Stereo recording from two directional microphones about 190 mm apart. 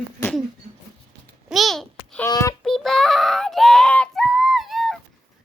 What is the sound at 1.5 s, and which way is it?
Babbling, centre (ahead or behind).